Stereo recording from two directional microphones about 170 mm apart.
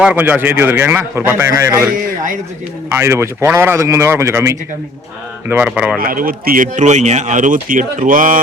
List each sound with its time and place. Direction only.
0.0 s a man's voice: 5° right (ahead or behind)
2.9 s a man's voice: 15° right (ahead or behind)
6.0 s speech: 55° right (ahead or behind)